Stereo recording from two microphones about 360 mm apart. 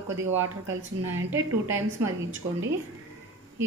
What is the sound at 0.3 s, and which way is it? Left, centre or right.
Speech, right.